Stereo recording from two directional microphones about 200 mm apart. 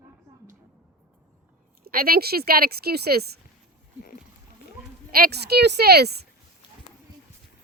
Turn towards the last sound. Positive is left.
turn(degrees=-55)  # may be behind; listen again after turning